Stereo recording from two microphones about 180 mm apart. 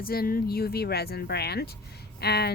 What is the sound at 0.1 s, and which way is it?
Speech, 55° left (ahead or behind).